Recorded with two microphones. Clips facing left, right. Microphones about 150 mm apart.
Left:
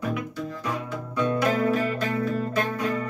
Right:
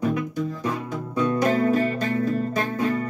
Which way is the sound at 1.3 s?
35° right (ahead or behind).